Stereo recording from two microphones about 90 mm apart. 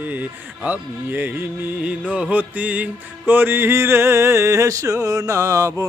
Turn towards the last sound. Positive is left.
turn(degrees=-35)  # may be behind; listen again after turning